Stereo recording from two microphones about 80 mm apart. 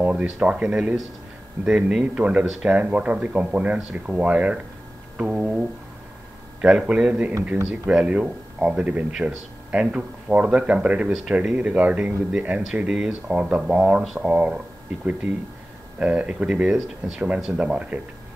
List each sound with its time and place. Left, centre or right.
0.0 s speech: centre
16.0 s speech: centre